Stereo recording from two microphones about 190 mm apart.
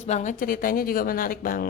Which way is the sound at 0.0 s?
40° left (ahead or behind).